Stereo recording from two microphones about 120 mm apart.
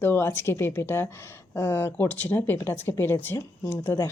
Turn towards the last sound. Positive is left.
turn(degrees=20)  # may be behind; listen again after turning